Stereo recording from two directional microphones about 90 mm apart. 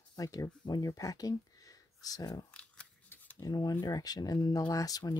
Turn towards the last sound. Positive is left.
turn(degrees=40)  # may be behind; listen again after turning